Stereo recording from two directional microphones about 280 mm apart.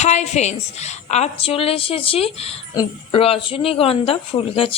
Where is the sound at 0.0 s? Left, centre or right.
Left.